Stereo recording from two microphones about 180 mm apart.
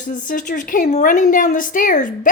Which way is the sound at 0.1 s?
45° left (ahead or behind).